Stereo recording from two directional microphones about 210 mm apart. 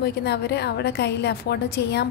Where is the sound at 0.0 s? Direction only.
50° left (ahead or behind).